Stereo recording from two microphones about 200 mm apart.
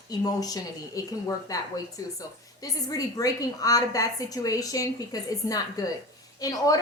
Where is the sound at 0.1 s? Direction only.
20° left (ahead or behind).